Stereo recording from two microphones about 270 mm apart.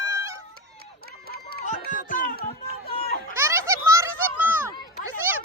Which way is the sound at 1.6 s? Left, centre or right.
Left.